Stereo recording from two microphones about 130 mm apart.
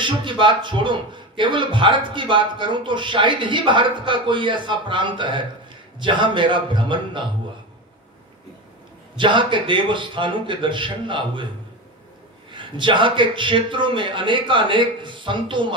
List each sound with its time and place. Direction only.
0.0 s a man's voice: 40° right (ahead or behind)
9.2 s a man's voice: 40° right (ahead or behind)
12.5 s a man's voice: 40° right (ahead or behind)